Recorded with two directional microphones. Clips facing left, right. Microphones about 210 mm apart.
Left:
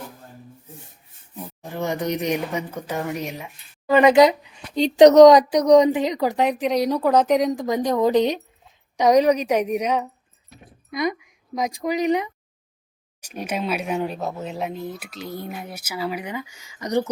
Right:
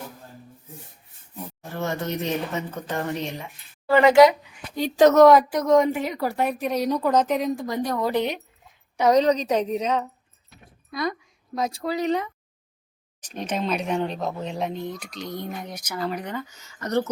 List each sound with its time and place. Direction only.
1.7 s a woman's voice: 15° left (ahead or behind)